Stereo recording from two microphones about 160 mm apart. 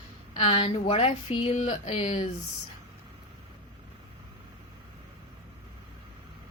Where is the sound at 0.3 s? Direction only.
40° left (ahead or behind).